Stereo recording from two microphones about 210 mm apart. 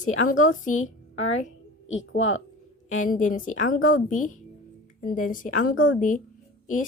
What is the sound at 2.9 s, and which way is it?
Speech, 35° left (ahead or behind).